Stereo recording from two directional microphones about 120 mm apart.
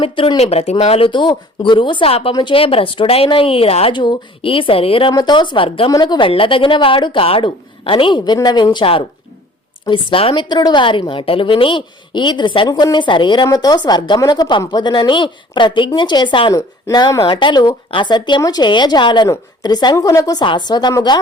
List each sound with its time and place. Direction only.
0.0 s speech: 45° left (ahead or behind)
0.3 s speech: 60° left (ahead or behind)
2.3 s speech: 40° left (ahead or behind)
3.9 s speech: 40° left (ahead or behind)
5.1 s a woman's voice: 40° left (ahead or behind)
5.9 s a woman's voice: 35° left (ahead or behind)
10.5 s a woman's voice: 35° left (ahead or behind)
16.6 s a woman's voice: 30° left (ahead or behind)
20.4 s a woman's voice: 40° left (ahead or behind)